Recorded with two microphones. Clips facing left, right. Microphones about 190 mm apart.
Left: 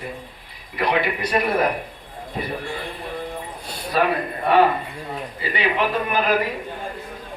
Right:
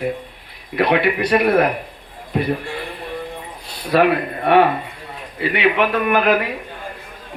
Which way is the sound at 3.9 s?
65° right (ahead or behind).